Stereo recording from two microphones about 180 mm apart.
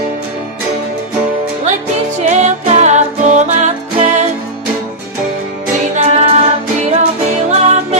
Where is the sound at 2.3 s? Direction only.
40° right (ahead or behind).